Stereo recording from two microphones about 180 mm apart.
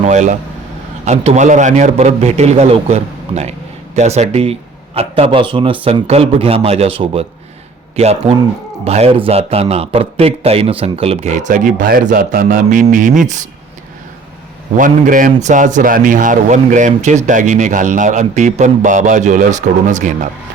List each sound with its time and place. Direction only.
0.0 s vehicle: 40° right (ahead or behind)
1.0 s speech: 35° right (ahead or behind)
14.8 s a man's voice: 45° right (ahead or behind)